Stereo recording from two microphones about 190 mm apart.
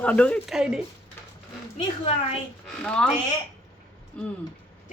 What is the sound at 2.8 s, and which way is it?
Speech, 5° left (ahead or behind).